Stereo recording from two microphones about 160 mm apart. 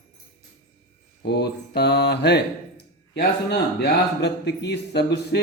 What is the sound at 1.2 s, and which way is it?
Mantra, 90° left.